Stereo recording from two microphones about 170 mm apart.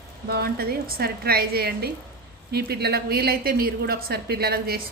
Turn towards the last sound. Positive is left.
turn(degrees=-65)  # may be behind; listen again after turning